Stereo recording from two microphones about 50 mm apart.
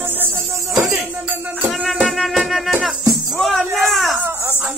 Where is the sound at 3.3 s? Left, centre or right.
Centre.